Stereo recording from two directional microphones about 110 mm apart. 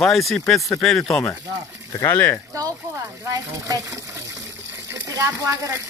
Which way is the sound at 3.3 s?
30° right (ahead or behind).